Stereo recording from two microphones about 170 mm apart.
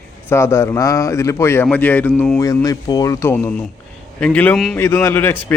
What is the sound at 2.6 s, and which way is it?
Speech, 20° left (ahead or behind).